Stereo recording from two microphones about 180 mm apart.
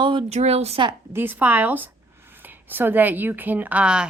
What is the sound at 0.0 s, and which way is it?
Speech, 25° right (ahead or behind).